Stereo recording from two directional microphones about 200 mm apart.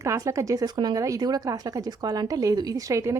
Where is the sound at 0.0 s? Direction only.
15° right (ahead or behind).